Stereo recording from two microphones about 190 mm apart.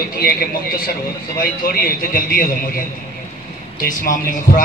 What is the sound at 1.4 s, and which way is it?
A man's voice, 50° left (ahead or behind).